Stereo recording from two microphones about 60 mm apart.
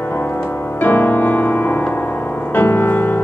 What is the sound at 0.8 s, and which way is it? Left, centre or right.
Music, left.